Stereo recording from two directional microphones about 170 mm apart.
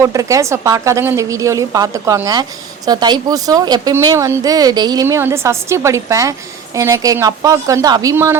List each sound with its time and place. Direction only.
0.0 s a woman's voice: 20° right (ahead or behind)